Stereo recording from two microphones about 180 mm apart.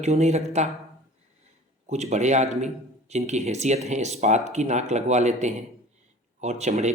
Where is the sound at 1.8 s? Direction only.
40° right (ahead or behind).